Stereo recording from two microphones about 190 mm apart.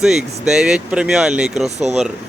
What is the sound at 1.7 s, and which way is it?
Speech, 35° right (ahead or behind).